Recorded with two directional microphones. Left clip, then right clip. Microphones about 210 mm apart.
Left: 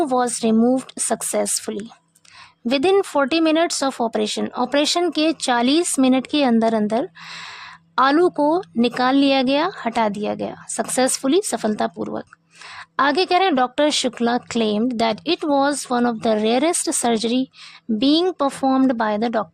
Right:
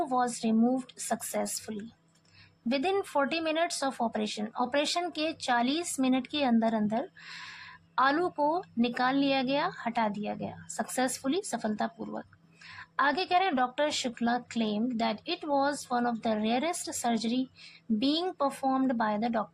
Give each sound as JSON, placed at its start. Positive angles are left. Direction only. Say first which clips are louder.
{"t": 0.0, "sound": "speech", "louder": "left 10 dB", "side_deg": 45}